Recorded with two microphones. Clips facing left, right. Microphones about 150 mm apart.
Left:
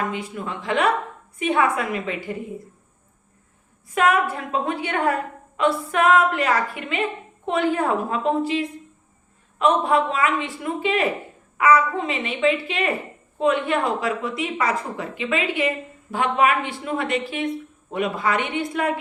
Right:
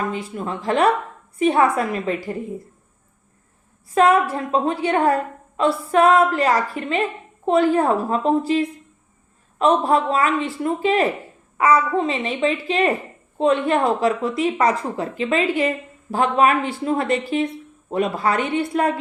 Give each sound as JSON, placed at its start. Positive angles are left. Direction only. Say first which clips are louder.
{"t": 0.3, "sound": "a woman's voice", "louder": "right 4 dB", "side_deg": -35}
{"t": 3.9, "sound": "a woman's voice", "louder": "right 4 dB", "side_deg": -35}